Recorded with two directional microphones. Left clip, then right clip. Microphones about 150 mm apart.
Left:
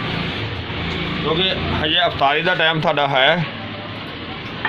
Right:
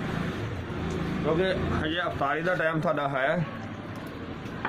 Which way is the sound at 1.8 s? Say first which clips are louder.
Left 12 dB; 65° left (ahead or behind).